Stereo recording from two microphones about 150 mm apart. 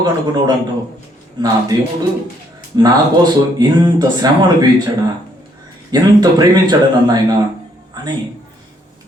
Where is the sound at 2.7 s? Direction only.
25° right (ahead or behind).